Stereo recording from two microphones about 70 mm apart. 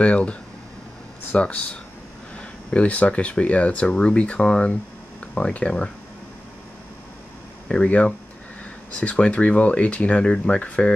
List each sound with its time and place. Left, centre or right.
0.0 s speech: centre
7.6 s speech: centre